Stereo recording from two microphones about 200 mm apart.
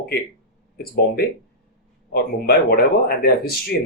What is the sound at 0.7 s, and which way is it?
Speech, 50° left (ahead or behind).